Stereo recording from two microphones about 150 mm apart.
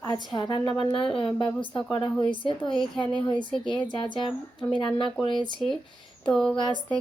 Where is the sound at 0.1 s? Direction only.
30° left (ahead or behind).